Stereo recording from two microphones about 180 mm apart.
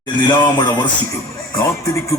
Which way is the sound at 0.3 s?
25° left (ahead or behind).